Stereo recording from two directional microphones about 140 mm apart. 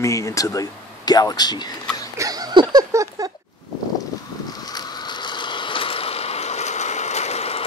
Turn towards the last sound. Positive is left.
turn(degrees=50)  # may be behind; listen again after turning